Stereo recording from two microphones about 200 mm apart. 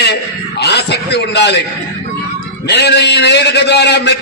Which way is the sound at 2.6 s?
55° left (ahead or behind).